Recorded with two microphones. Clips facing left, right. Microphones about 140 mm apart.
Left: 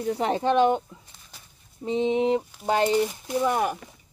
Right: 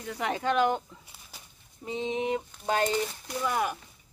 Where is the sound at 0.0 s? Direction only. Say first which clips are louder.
Left 6 dB; 30° left (ahead or behind).